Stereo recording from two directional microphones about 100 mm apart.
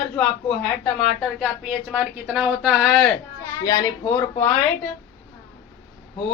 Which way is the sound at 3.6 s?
30° left (ahead or behind).